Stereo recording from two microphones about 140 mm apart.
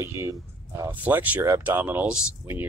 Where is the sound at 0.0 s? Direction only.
20° right (ahead or behind).